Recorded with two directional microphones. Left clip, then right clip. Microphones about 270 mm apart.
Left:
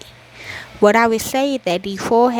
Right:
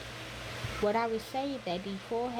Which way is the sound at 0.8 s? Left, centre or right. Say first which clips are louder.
Left 17 dB; left.